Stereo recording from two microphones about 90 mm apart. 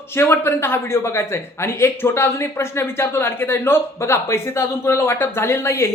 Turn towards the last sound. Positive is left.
turn(degrees=30)  # may be behind; listen again after turning